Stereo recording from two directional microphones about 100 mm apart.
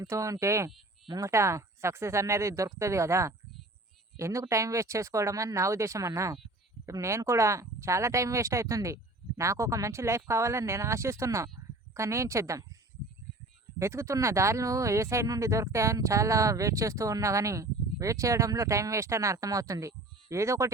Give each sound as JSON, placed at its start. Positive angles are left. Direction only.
{"t": 0.0, "sound": "speech", "side_deg": -35}
{"t": 13.7, "sound": "speech", "side_deg": -30}